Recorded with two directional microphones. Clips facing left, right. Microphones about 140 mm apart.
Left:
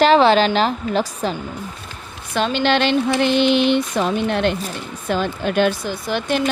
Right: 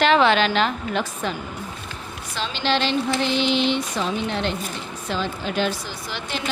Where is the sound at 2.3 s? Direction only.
55° left (ahead or behind).